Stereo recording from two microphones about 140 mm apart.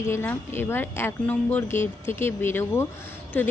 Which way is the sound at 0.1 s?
15° left (ahead or behind).